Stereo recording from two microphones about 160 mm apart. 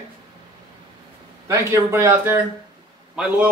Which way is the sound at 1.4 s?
20° right (ahead or behind).